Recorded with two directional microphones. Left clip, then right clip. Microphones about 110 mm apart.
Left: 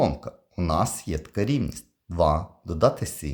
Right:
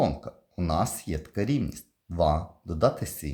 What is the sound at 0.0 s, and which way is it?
Speech, 30° left (ahead or behind).